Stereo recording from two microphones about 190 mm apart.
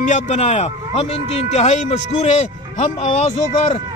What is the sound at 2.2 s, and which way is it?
Speech, 35° left (ahead or behind).